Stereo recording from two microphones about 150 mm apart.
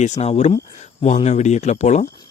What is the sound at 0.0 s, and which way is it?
Speech, 45° left (ahead or behind).